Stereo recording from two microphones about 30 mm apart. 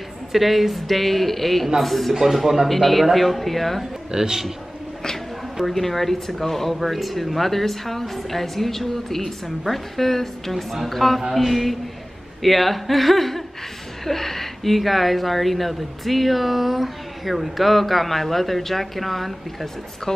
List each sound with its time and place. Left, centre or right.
0.3 s speech: centre
2.4 s speech: centre
2.7 s speech: centre
4.1 s a man's voice: right
5.7 s a woman's voice: centre
10.5 s speech: centre